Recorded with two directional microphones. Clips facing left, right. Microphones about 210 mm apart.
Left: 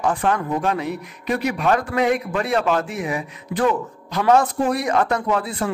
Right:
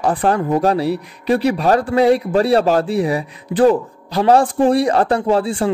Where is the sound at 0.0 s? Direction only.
35° right (ahead or behind).